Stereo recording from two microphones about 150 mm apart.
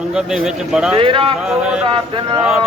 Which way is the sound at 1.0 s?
35° right (ahead or behind).